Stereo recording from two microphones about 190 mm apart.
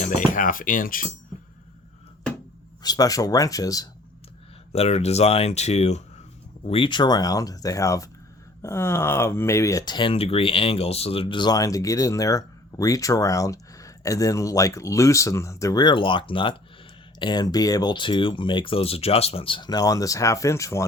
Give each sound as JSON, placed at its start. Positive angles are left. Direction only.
{"t": 0.0, "sound": "speech", "side_deg": 40}
{"t": 2.8, "sound": "speech", "side_deg": 20}
{"t": 4.7, "sound": "speech", "side_deg": 35}